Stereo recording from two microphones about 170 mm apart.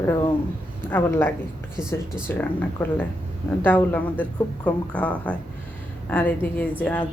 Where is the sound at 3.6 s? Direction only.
10° left (ahead or behind).